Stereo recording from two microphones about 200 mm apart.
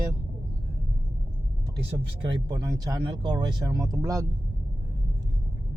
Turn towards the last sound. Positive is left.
turn(degrees=-15)  # may be behind; listen again after turning